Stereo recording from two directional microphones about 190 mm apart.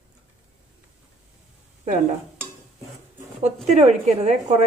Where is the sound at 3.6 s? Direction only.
35° right (ahead or behind).